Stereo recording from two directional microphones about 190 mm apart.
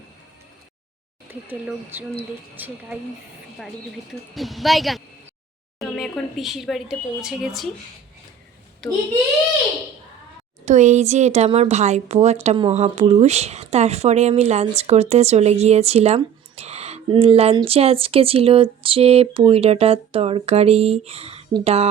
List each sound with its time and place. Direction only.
1.3 s speech: 10° right (ahead or behind)
4.4 s speech: centre (ahead or behind)
8.8 s speech: 5° left (ahead or behind)
10.7 s speech: 40° right (ahead or behind)